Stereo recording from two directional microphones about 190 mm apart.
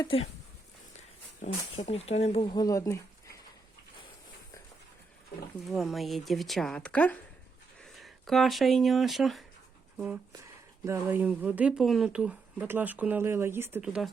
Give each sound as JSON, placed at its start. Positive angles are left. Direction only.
{"t": 0.0, "sound": "speech", "side_deg": 30}
{"t": 1.7, "sound": "speech", "side_deg": 30}
{"t": 5.6, "sound": "speech", "side_deg": 0}
{"t": 10.8, "sound": "speech", "side_deg": -10}